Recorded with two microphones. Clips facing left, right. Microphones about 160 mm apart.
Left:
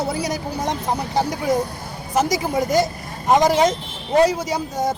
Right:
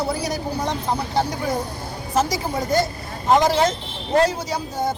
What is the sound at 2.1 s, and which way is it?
A woman's voice, 20° left (ahead or behind).